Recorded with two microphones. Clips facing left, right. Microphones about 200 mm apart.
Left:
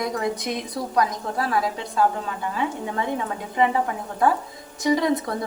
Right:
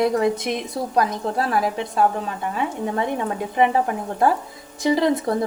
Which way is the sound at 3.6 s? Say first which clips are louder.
Right 2 dB; 30° right (ahead or behind).